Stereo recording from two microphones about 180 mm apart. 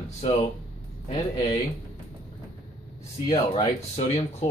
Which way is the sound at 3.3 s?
30° left (ahead or behind).